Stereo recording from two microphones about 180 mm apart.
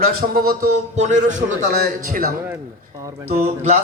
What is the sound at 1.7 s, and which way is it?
Speech, 55° right (ahead or behind).